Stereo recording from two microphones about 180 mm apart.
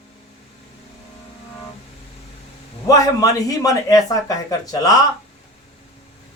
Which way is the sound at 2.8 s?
20° left (ahead or behind).